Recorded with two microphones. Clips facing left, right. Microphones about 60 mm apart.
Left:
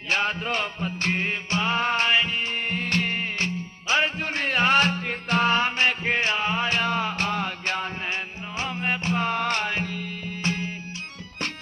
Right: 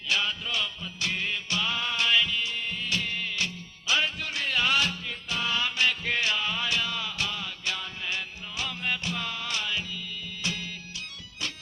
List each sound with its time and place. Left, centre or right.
0.1 s music: left